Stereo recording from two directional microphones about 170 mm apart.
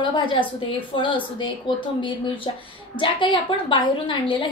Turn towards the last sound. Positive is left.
turn(degrees=30)  # may be behind; listen again after turning